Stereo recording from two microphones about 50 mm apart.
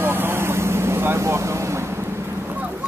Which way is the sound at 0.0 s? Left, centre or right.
Right.